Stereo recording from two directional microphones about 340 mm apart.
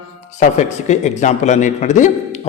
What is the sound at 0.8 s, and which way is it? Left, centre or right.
A man's voice, left.